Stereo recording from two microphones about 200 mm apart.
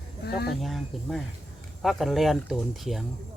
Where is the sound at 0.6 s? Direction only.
Centre (ahead or behind).